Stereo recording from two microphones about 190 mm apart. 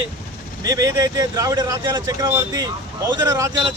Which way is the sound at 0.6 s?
20° right (ahead or behind).